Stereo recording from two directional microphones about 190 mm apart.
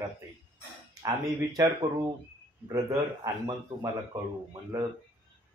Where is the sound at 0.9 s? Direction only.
20° right (ahead or behind).